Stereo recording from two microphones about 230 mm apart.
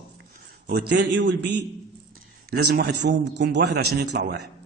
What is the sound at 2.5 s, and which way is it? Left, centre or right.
A man's voice, right.